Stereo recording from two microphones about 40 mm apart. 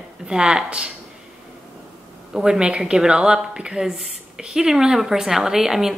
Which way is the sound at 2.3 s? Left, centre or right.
Centre.